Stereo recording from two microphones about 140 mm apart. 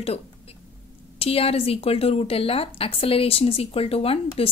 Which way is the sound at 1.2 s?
45° left (ahead or behind).